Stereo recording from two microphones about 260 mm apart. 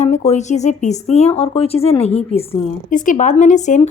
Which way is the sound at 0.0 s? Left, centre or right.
Left.